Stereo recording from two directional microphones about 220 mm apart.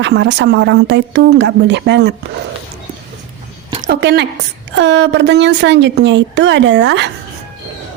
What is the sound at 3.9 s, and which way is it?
Speech, 50° right (ahead or behind).